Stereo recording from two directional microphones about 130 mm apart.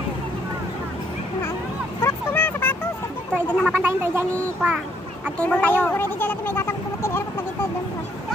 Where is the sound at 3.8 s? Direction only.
20° right (ahead or behind).